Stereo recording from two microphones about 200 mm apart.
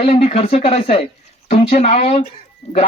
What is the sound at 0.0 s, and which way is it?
Speech, 30° left (ahead or behind).